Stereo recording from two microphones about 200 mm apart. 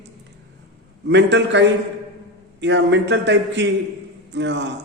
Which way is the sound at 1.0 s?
60° right (ahead or behind).